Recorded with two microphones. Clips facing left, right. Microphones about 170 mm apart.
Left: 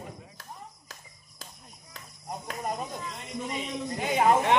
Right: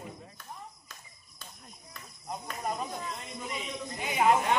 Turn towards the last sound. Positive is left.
turn(degrees=60)  # may be behind; listen again after turning